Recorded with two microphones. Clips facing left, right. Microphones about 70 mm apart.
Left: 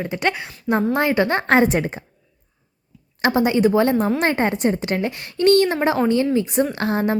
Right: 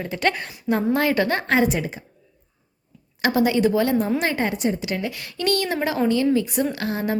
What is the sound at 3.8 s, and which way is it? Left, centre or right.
A woman's voice, left.